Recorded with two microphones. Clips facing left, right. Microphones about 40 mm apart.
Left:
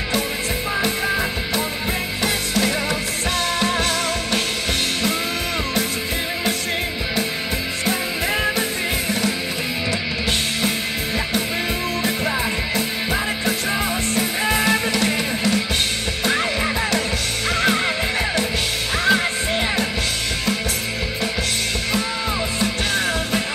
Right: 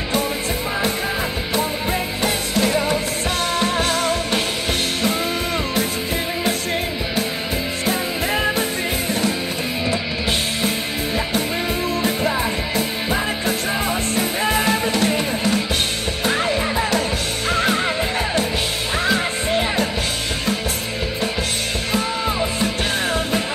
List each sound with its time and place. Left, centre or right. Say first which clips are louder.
2.2 s music: right 1 dB; centre
7.8 s music: even; centre
12.2 s music: right 1 dB; centre
19.0 s music: left 2 dB; centre